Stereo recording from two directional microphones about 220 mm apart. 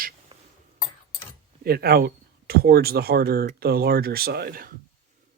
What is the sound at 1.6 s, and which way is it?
Speech, 45° right (ahead or behind).